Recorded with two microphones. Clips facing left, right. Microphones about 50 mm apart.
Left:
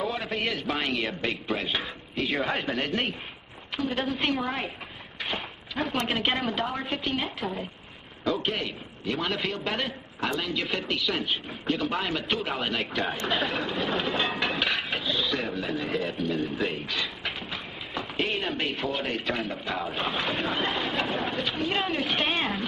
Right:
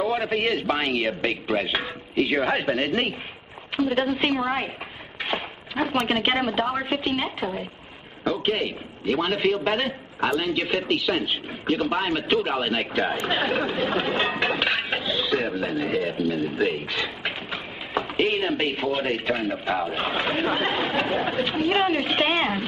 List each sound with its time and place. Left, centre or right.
0.1 s a man's voice: right
2.4 s a man's voice: centre
5.2 s a sound: centre
5.9 s a man's voice: centre
6.7 s a man's voice: centre
16.2 s a man's voice: centre
16.9 s a sound: centre
18.9 s a man's voice: centre